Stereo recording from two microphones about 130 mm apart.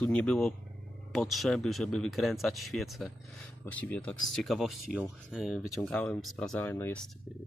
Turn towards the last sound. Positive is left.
turn(degrees=20)  # may be behind; listen again after turning